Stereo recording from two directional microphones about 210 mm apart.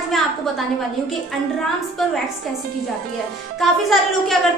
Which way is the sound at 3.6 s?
Centre (ahead or behind).